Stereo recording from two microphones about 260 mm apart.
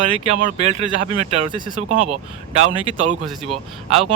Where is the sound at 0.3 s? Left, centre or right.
Right.